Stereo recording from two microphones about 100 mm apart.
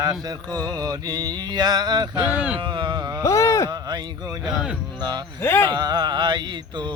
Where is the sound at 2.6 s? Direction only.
45° right (ahead or behind).